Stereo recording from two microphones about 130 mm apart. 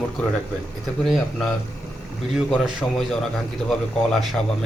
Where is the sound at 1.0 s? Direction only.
Centre (ahead or behind).